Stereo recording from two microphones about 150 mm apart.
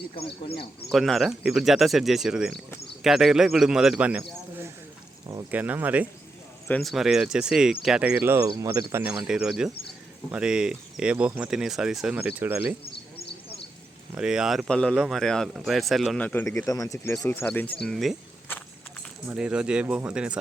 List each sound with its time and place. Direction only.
0.2 s speech: 40° left (ahead or behind)
0.9 s a man's voice: centre (ahead or behind)
6.7 s speech: 5° left (ahead or behind); by 12.7 s 10° right (ahead or behind)
14.2 s speech: 5° right (ahead or behind); by 17.7 s 10° left (ahead or behind)
17.8 s speech: centre (ahead or behind)
19.3 s speech: 5° right (ahead or behind)